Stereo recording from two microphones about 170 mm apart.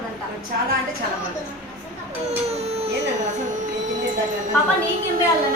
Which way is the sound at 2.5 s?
40° right (ahead or behind).